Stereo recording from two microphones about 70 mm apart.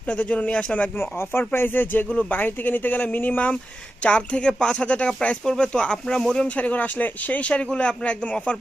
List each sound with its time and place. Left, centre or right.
0.1 s speech: centre
0.9 s speech: left; by 6.7 s centre
6.7 s speech: left